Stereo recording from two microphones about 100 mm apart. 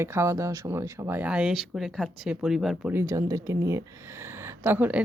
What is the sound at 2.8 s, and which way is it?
Speech, 25° right (ahead or behind).